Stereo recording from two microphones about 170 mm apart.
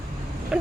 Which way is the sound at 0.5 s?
5° right (ahead or behind).